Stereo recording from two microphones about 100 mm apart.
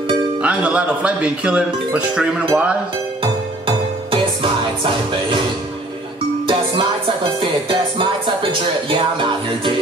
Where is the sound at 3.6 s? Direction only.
60° right (ahead or behind).